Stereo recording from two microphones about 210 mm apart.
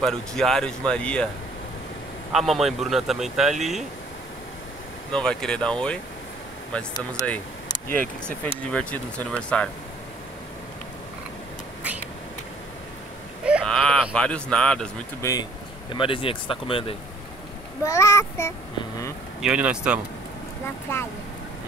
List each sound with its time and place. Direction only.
0.0 s speech: centre (ahead or behind)
2.3 s speech: centre (ahead or behind)
5.1 s speech: 5° left (ahead or behind)
7.0 s speech: 5° left (ahead or behind)
13.5 s speech: centre (ahead or behind)
15.9 s speech: 25° left (ahead or behind)
17.8 s speech: 15° left (ahead or behind)
19.4 s speech: 5° right (ahead or behind)
20.9 s speech: 10° left (ahead or behind)